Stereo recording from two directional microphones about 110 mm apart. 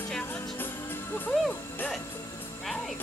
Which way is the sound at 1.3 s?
5° left (ahead or behind).